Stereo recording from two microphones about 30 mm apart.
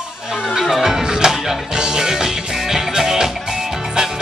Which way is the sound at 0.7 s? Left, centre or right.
Centre.